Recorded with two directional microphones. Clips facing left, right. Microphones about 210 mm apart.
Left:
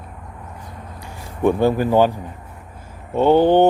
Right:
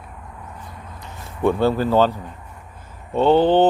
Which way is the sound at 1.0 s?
15° left (ahead or behind).